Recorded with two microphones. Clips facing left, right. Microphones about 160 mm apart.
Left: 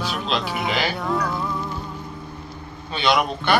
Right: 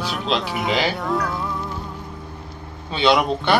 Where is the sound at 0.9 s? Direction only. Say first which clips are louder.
Right 1 dB; centre (ahead or behind).